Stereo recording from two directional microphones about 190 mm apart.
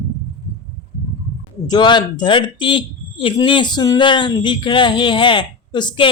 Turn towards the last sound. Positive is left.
turn(degrees=25)  # may be behind; listen again after turning